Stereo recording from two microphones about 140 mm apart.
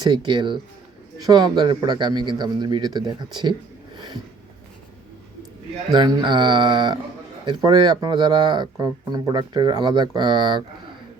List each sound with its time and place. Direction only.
0.0 s speech: 30° right (ahead or behind)
3.9 s a sound: 30° right (ahead or behind)
5.9 s speech: 30° right (ahead or behind)